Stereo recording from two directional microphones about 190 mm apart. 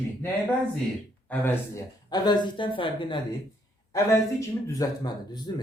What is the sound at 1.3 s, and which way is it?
Speech, 10° left (ahead or behind).